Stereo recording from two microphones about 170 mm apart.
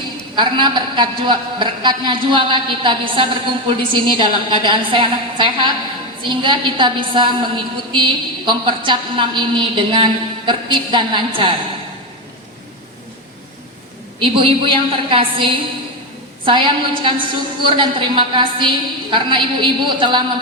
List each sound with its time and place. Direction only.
0.3 s a man's voice: 25° right (ahead or behind)
14.2 s a man's voice: 30° right (ahead or behind)